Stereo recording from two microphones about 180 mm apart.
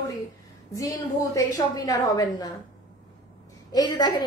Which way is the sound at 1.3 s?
20° left (ahead or behind).